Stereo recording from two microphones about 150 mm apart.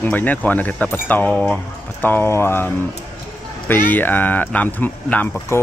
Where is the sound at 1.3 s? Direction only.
Centre (ahead or behind).